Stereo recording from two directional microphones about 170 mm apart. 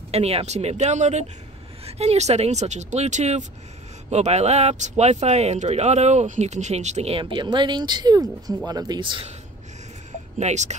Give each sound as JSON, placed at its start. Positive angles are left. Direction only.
{"t": 0.1, "sound": "speech", "side_deg": -35}
{"t": 10.4, "sound": "speech", "side_deg": -45}